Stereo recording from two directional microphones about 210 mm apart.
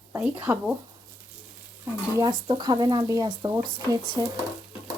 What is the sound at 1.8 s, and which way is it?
Speech, 15° right (ahead or behind).